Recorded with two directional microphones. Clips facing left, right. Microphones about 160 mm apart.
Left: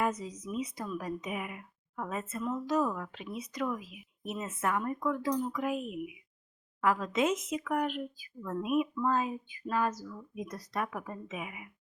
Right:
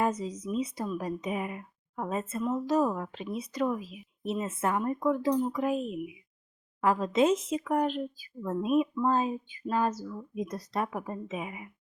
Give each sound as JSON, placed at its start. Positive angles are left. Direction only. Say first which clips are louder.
{"t": 0.0, "sound": "speech", "louder": "right 3 dB", "side_deg": -30}